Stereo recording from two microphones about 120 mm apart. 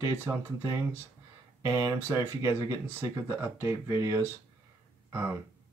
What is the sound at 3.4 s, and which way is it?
Speech, 20° right (ahead or behind).